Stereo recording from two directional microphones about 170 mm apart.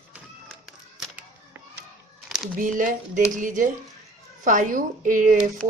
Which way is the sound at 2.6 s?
50° right (ahead or behind).